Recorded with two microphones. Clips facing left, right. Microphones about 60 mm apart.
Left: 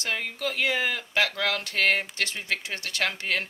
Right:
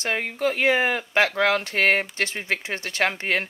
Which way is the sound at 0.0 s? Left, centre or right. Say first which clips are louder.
Right 6 dB; right.